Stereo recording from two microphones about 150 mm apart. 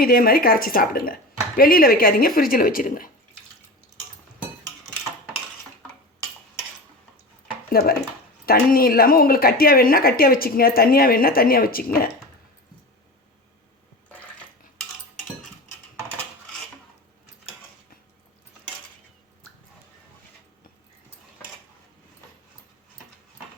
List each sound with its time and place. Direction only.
0.0 s speech: 80° left
7.7 s speech: 80° left